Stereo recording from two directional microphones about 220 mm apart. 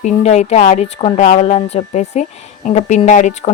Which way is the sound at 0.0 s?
30° left (ahead or behind).